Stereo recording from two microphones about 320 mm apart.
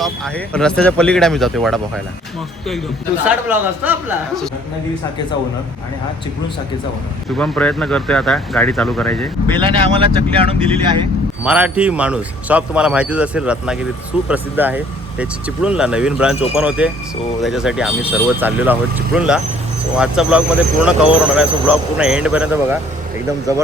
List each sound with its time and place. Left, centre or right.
0.0 s a man's voice: centre
3.2 s a man's voice: centre
7.3 s a man's voice: centre
9.5 s speech: centre
11.4 s a man's voice: centre